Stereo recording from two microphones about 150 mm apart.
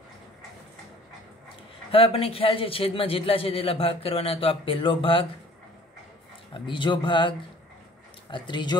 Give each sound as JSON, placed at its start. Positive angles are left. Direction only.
{"t": 1.9, "sound": "a man's voice", "side_deg": 40}
{"t": 6.5, "sound": "a man's voice", "side_deg": 35}